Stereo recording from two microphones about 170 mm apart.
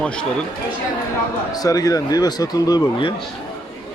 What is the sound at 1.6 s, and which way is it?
Speech, 20° left (ahead or behind).